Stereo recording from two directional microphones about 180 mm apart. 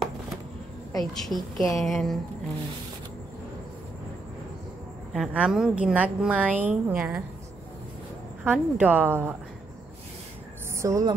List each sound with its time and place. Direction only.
0.9 s a woman's voice: centre (ahead or behind)
5.1 s a woman's voice: 5° right (ahead or behind)
8.5 s a woman's voice: 10° right (ahead or behind)
10.8 s a woman's voice: 20° right (ahead or behind)